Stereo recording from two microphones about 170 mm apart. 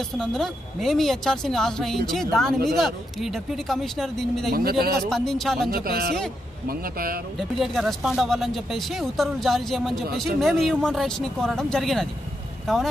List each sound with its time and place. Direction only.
0.2 s speech: centre (ahead or behind)
4.6 s a man's voice: 65° right (ahead or behind)
5.1 s speech: centre (ahead or behind)
5.7 s a man's voice: 60° right (ahead or behind)
7.3 s speech: centre (ahead or behind)